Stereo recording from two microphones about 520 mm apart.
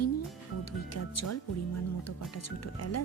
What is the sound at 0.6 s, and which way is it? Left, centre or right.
Speech, left.